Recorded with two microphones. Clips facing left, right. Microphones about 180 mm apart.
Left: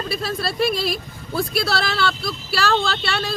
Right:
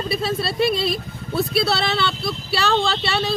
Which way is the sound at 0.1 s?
Centre (ahead or behind).